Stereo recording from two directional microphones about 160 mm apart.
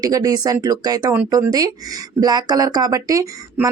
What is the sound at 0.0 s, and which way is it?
Speech, 25° right (ahead or behind).